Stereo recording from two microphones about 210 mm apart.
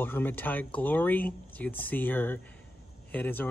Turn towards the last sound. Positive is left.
turn(degrees=10)  # may be behind; listen again after turning